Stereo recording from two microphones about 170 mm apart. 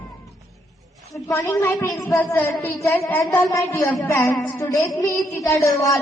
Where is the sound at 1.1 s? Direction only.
20° left (ahead or behind).